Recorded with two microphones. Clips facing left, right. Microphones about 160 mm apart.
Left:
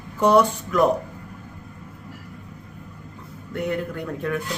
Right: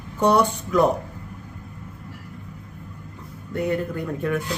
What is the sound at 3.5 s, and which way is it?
Speech, centre (ahead or behind).